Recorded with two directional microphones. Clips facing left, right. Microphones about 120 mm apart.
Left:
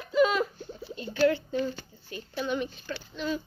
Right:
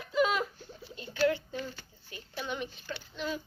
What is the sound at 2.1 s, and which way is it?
A woman's voice, 15° right (ahead or behind).